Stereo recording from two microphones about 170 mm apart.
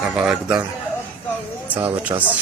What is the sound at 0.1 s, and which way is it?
Speech, 5° right (ahead or behind).